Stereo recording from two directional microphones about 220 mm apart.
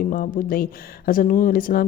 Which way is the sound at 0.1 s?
40° left (ahead or behind).